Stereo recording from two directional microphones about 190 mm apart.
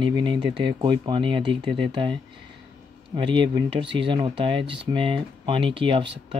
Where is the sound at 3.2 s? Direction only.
25° right (ahead or behind).